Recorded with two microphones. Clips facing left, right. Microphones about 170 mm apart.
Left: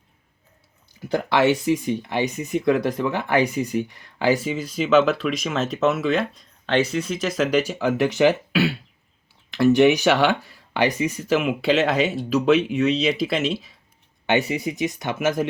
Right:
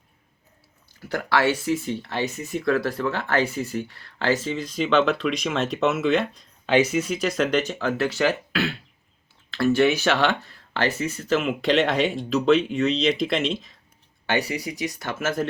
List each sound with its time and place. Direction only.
0.9 s speech: 15° left (ahead or behind)
14.3 s speech: 20° left (ahead or behind)